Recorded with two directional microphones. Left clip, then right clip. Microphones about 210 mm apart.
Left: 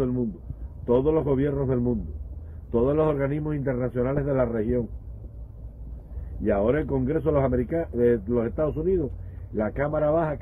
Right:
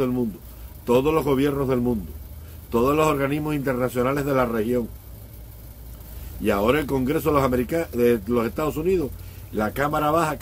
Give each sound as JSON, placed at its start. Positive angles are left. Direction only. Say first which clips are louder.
{"t": 0.8, "sound": "speech", "louder": "right 2 dB", "side_deg": -15}
{"t": 6.4, "sound": "speech", "louder": "right 2 dB", "side_deg": -15}